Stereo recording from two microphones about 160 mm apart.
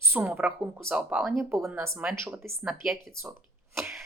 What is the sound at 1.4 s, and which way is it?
Speech, 15° right (ahead or behind).